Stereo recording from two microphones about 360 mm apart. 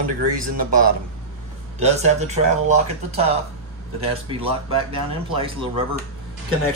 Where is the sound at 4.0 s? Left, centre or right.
Centre.